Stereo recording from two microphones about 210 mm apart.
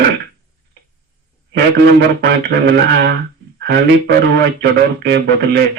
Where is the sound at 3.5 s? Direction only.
50° right (ahead or behind).